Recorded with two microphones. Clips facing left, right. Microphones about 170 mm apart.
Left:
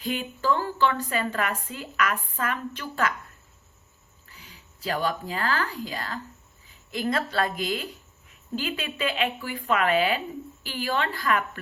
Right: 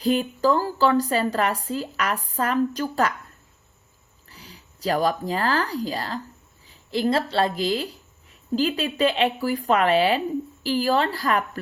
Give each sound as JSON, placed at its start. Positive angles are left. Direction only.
{"t": 0.0, "sound": "a woman's voice", "side_deg": -40}
{"t": 4.3, "sound": "a woman's voice", "side_deg": -35}